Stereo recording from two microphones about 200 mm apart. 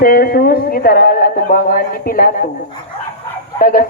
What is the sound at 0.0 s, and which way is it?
Speech, 50° left (ahead or behind).